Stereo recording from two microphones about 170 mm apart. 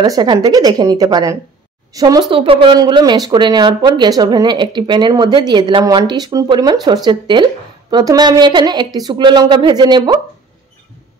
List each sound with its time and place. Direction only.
0.0 s speech: 25° right (ahead or behind)